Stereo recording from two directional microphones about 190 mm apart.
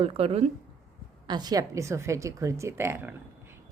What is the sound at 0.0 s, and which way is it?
Speech, 30° right (ahead or behind).